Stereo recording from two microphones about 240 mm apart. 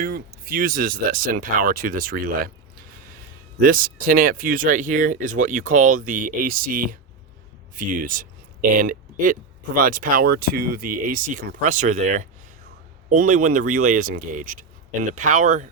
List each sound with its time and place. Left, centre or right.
0.0 s speech: right